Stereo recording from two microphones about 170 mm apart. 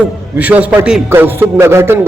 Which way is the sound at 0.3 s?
10° right (ahead or behind).